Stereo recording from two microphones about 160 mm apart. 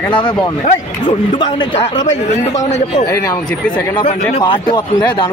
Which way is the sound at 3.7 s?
35° left (ahead or behind).